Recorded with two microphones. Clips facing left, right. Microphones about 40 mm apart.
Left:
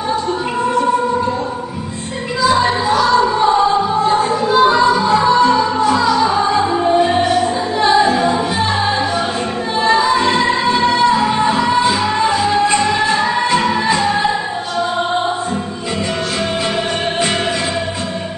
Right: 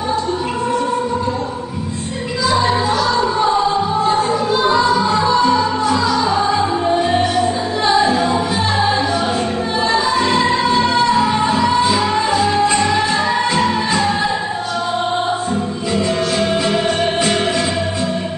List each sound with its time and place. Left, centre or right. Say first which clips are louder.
5.5 s music: left 2 dB; centre
8.5 s music: even; left
10.0 s music: left 1 dB; left
12.9 s music: left 1 dB; centre
13.6 s music: left 1 dB; left
16.0 s music: right 2 dB; left